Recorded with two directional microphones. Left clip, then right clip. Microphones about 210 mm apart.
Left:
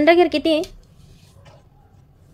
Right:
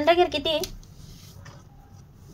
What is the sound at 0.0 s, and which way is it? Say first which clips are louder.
Speech: left 6 dB; 50° left (ahead or behind).